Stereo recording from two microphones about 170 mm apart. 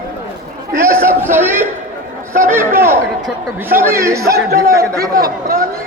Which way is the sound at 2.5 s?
15° right (ahead or behind).